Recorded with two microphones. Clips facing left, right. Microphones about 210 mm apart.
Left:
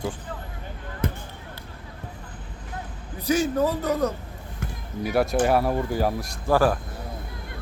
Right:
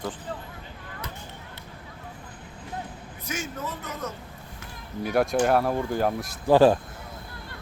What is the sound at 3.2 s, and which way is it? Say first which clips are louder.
Speech: left 12 dB; 35° left (ahead or behind).